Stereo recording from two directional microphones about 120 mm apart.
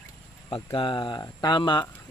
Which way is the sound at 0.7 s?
45° left (ahead or behind).